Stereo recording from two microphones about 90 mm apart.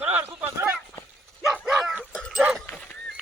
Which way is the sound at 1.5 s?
5° right (ahead or behind).